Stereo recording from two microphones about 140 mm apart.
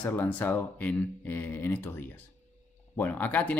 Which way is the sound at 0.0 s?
10° left (ahead or behind).